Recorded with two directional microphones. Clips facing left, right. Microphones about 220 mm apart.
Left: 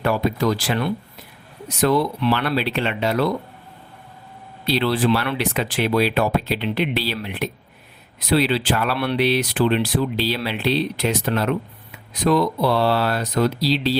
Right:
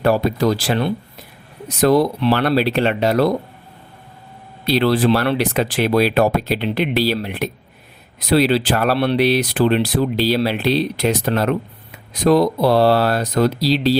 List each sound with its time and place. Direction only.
0.0 s speech: 35° right (ahead or behind)
4.6 s speech: 45° right (ahead or behind)